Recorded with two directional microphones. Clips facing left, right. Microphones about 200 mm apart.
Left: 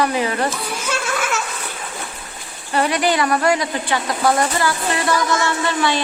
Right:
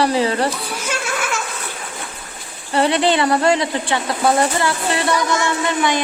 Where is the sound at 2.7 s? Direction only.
25° right (ahead or behind).